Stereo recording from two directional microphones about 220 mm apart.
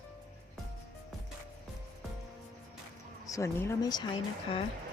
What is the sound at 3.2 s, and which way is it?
Speech, 15° left (ahead or behind).